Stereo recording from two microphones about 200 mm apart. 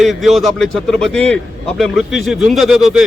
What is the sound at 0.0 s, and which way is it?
Speech, centre (ahead or behind).